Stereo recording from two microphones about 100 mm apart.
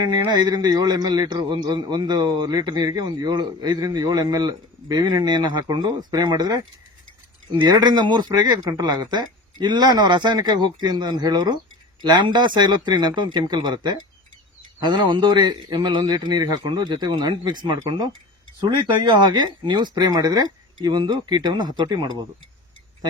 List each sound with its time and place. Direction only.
0.3 s a man's voice: 45° right (ahead or behind)